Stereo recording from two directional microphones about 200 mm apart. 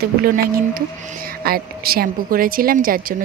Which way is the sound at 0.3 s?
45° right (ahead or behind).